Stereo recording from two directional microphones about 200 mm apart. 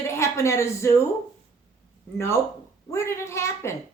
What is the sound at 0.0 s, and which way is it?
A woman's voice, 15° left (ahead or behind).